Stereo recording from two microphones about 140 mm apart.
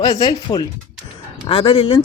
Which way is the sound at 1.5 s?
40° left (ahead or behind).